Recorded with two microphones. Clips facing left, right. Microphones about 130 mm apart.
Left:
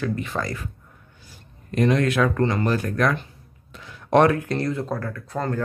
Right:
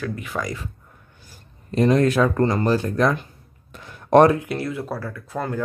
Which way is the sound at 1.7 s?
35° right (ahead or behind).